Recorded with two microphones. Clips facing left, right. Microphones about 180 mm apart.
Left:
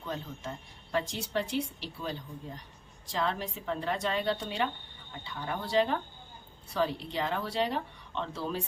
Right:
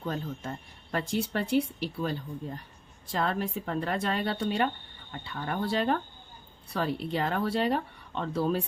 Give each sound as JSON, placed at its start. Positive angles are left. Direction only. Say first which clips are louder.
{"t": 0.0, "sound": "speech", "louder": "right 4 dB", "side_deg": -50}